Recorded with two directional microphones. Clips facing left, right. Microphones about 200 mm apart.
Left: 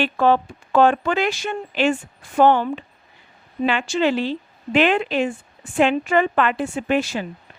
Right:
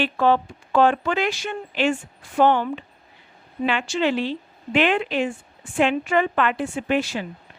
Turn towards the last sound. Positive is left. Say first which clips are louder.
# left 2 dB
turn(degrees=45)  # may be behind; listen again after turning